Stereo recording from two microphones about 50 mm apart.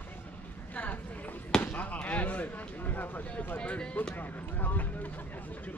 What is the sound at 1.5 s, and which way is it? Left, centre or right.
Chop, left.